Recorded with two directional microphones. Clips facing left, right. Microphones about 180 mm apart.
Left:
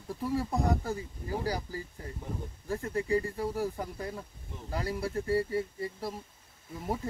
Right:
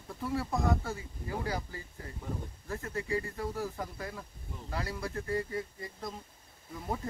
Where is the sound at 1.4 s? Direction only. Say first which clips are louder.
Left 3 dB; 35° left (ahead or behind).